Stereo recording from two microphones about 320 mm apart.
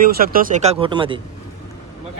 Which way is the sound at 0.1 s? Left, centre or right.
Right.